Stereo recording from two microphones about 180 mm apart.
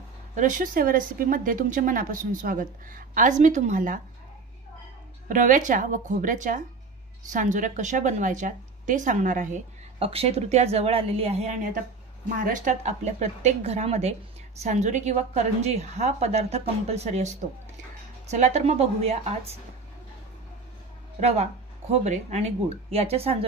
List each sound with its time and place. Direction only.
0.4 s a woman's voice: 45° right (ahead or behind)
5.3 s a woman's voice: 45° right (ahead or behind)
9.9 s a woman's voice: 35° right (ahead or behind)
18.3 s a woman's voice: 40° right (ahead or behind)
21.2 s a woman's voice: 40° right (ahead or behind)